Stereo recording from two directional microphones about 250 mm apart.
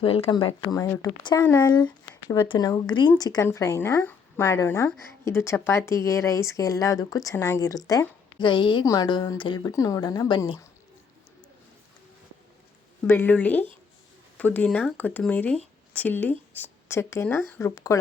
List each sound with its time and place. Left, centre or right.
0.0 s speech: left
13.1 s speech: centre